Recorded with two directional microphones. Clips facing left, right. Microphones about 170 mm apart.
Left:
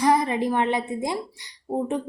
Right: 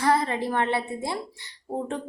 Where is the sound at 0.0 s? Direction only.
15° left (ahead or behind).